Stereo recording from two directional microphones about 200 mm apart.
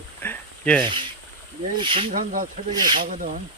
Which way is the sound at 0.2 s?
10° left (ahead or behind).